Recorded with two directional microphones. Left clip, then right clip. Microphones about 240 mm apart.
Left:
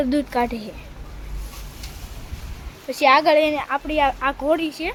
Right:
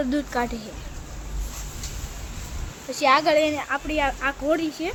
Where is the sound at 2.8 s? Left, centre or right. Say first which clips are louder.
Left 4 dB; left; by 4.9 s centre.